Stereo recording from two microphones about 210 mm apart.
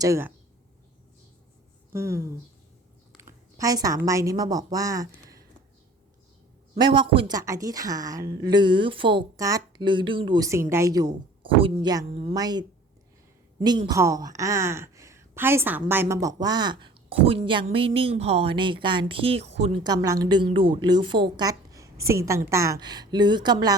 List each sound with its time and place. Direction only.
0.0 s a woman's voice: 10° right (ahead or behind)
1.9 s speech: 15° right (ahead or behind)
6.7 s a woman's voice: 20° right (ahead or behind)